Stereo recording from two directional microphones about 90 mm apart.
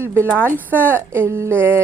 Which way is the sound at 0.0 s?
25° right (ahead or behind).